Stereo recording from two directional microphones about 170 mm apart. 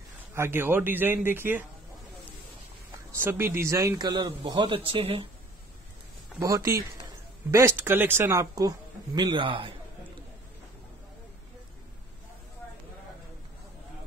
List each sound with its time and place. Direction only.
0.3 s speech: 15° right (ahead or behind)
3.1 s a man's voice: 15° right (ahead or behind); by 5.3 s 30° right (ahead or behind)
6.4 s speech: 20° right (ahead or behind)